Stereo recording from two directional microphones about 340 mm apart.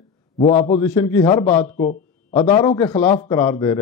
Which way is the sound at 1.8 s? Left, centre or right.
Centre.